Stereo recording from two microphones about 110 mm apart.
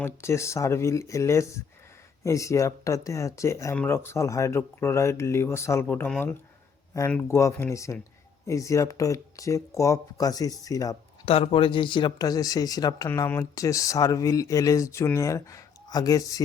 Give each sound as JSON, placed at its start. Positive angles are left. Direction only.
{"t": 0.0, "sound": "speech", "side_deg": 25}
{"t": 7.2, "sound": "speech", "side_deg": 25}
{"t": 11.3, "sound": "speech", "side_deg": 55}
{"t": 13.1, "sound": "speech", "side_deg": 20}